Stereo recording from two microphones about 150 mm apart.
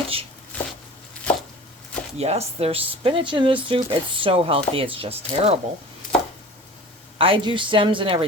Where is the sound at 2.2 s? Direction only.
45° right (ahead or behind).